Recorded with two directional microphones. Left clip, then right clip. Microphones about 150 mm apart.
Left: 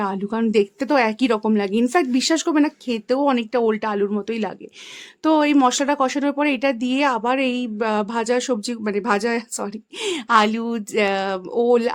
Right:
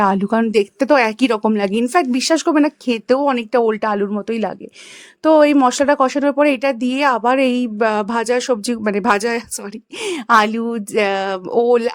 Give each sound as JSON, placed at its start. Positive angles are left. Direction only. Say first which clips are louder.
{"t": 0.0, "sound": "speech", "louder": "right 8 dB", "side_deg": -50}
{"t": 10.6, "sound": "speech", "louder": "right 4 dB", "side_deg": -25}
{"t": 10.9, "sound": "speech", "louder": "right 3 dB", "side_deg": -45}